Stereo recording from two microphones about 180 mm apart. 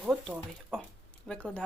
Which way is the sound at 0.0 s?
5° right (ahead or behind).